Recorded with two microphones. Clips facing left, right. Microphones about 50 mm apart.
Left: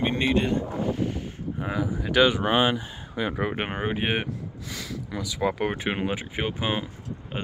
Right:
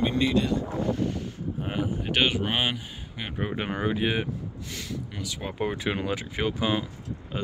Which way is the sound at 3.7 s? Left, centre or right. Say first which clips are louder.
Right 3 dB; left.